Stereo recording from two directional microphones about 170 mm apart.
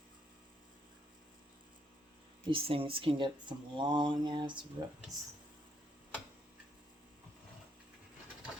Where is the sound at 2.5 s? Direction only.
30° right (ahead or behind).